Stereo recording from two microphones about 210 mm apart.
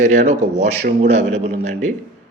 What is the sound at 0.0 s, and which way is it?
A man's voice, 35° right (ahead or behind).